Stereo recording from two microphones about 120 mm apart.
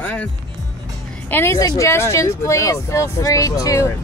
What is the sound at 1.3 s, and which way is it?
Speech, 20° left (ahead or behind).